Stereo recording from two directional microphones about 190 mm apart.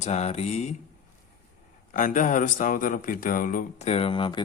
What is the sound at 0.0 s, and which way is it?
Speech, 35° left (ahead or behind).